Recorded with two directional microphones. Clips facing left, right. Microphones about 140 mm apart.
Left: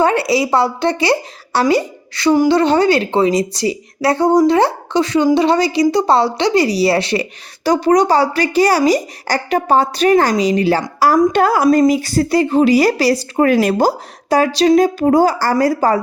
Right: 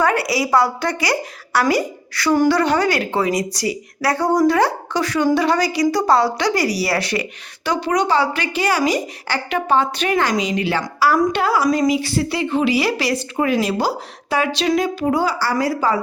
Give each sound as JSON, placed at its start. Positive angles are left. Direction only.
{"t": 0.0, "sound": "a woman's voice", "side_deg": 25}
{"t": 13.4, "sound": "a woman's voice", "side_deg": 50}